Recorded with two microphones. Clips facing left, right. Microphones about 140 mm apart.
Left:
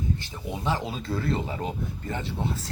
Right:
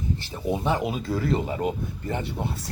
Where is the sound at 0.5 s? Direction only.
20° right (ahead or behind).